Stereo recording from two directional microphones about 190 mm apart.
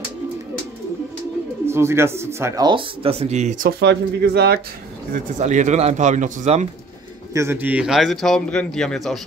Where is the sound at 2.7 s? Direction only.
30° right (ahead or behind).